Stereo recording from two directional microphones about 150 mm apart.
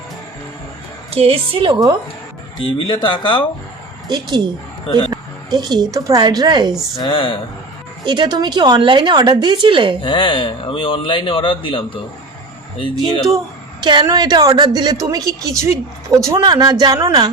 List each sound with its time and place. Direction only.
1.1 s a woman's voice: 40° right (ahead or behind)
2.6 s speech: 35° left (ahead or behind)
4.1 s a woman's voice: 30° right (ahead or behind)
4.9 s speech: 35° left (ahead or behind)
5.1 s a woman's voice: 25° right (ahead or behind)
6.9 s speech: 35° left (ahead or behind)
8.0 s a woman's voice: 30° right (ahead or behind)
10.0 s speech: 35° left (ahead or behind)
13.8 s a woman's voice: 30° right (ahead or behind)